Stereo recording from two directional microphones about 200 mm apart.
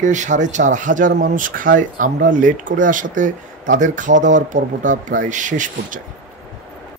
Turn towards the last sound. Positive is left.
turn(degrees=-40)  # may be behind; listen again after turning